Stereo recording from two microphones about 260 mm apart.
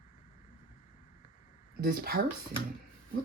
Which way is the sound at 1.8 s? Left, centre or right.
Right.